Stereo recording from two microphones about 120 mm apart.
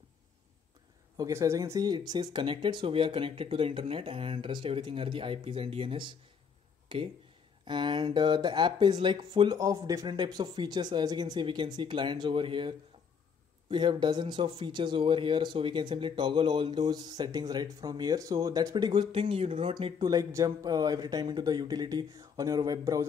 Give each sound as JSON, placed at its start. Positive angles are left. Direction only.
{"t": 1.1, "sound": "speech", "side_deg": -30}
{"t": 9.6, "sound": "speech", "side_deg": -30}
{"t": 19.7, "sound": "speech", "side_deg": -35}